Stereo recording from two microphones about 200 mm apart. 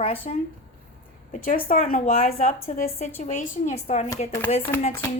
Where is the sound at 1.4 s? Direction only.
40° left (ahead or behind).